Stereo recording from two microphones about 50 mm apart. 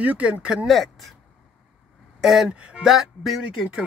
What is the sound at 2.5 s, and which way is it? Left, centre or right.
Speech, right.